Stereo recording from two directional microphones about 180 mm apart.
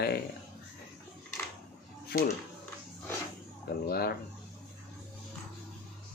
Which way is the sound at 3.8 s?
60° left (ahead or behind).